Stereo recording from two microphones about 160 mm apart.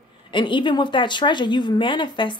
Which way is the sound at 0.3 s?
30° left (ahead or behind).